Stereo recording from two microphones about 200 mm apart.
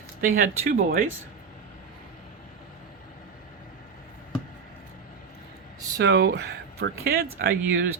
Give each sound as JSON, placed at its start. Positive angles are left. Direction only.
{"t": 0.2, "sound": "speech", "side_deg": -45}
{"t": 6.0, "sound": "speech", "side_deg": -60}